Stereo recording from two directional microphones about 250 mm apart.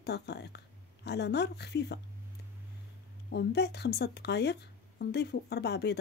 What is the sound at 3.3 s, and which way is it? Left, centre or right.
Speech, left.